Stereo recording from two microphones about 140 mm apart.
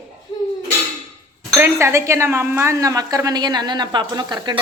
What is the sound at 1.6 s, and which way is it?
A woman's voice, 20° right (ahead or behind).